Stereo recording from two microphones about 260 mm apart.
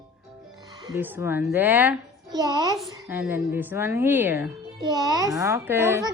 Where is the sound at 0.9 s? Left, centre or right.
Centre.